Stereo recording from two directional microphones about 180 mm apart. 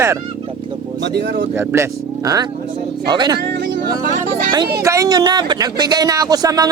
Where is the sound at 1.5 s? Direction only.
15° right (ahead or behind).